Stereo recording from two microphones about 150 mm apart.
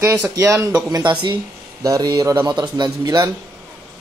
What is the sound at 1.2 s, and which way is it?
A man's voice, 30° right (ahead or behind).